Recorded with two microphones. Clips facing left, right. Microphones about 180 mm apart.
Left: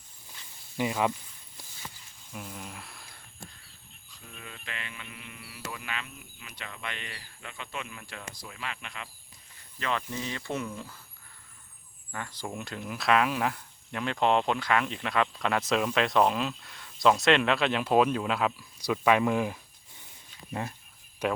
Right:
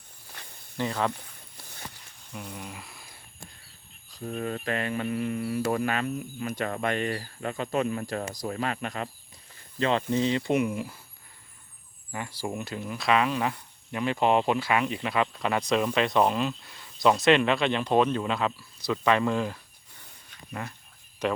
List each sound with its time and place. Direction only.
0.3 s snake: 65° right (ahead or behind)
0.8 s speech: 10° left (ahead or behind)
1.1 s a sound: 65° right (ahead or behind)
2.3 s speech: 5° left (ahead or behind)
4.1 s speech: 45° right (ahead or behind)
9.7 s speech: 30° right (ahead or behind); by 11.0 s 15° right (ahead or behind)
12.1 s speech: 10° right (ahead or behind); by 19.5 s 15° left (ahead or behind)
20.5 s speech: 25° left (ahead or behind)
21.2 s speech: 10° left (ahead or behind)